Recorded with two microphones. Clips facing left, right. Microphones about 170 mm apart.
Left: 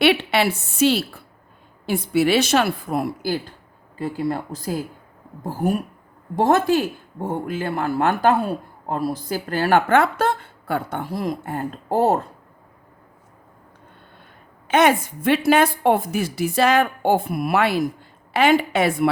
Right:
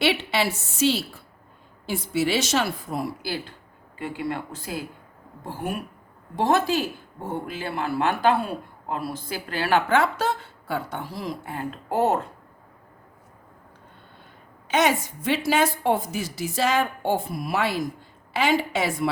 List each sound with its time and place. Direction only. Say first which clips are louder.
0.0 s a woman's voice: left 5 dB; 60° left (ahead or behind)
3.9 s speech: left 5 dB; 35° left (ahead or behind)
14.7 s a woman's voice: left 5 dB; 55° left (ahead or behind)